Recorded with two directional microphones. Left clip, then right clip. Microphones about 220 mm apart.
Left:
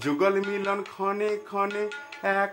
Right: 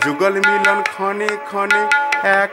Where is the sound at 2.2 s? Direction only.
20° right (ahead or behind).